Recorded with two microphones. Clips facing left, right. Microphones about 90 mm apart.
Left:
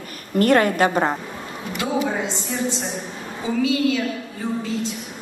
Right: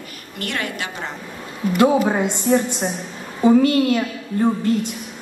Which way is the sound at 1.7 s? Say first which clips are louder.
Right 7 dB; 55° right (ahead or behind).